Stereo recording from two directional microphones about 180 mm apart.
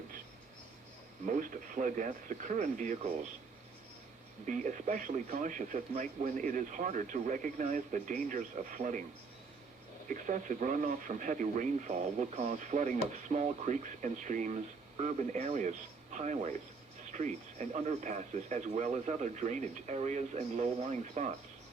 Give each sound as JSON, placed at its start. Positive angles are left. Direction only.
{"t": 1.2, "sound": "speech", "side_deg": -45}
{"t": 4.4, "sound": "speech", "side_deg": -45}
{"t": 10.1, "sound": "speech", "side_deg": -45}